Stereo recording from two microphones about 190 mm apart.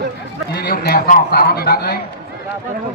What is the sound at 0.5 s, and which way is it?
A man's voice, 55° left (ahead or behind).